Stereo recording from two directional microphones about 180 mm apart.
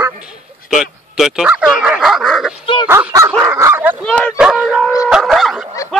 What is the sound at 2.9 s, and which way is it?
Bow-wow, 15° right (ahead or behind).